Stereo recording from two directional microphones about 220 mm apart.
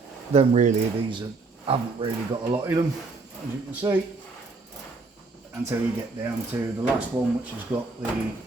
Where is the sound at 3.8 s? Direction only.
20° right (ahead or behind).